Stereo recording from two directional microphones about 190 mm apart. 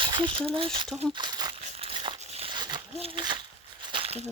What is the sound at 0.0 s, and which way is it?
Speech, 25° right (ahead or behind).